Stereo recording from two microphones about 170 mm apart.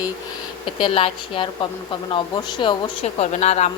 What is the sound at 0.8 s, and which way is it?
A woman's voice, 30° left (ahead or behind).